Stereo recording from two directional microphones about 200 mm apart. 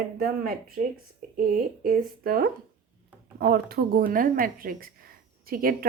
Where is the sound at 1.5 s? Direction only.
45° right (ahead or behind).